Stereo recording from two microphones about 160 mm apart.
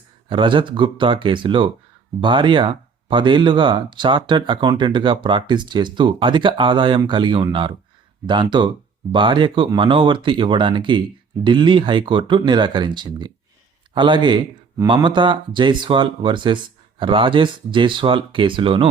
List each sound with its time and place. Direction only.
0.3 s speech: 30° right (ahead or behind)